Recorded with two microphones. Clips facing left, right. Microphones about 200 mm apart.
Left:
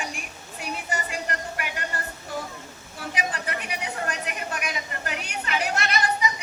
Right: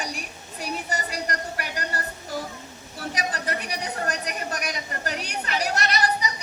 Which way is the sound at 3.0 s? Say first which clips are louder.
Right 1 dB; 40° right (ahead or behind).